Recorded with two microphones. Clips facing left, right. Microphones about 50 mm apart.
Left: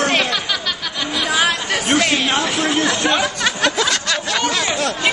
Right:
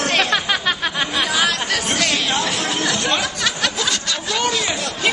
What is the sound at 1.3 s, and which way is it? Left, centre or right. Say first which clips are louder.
Chatter: left 3 dB; centre.